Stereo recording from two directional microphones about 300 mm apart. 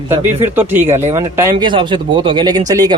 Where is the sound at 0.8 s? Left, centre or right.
Right.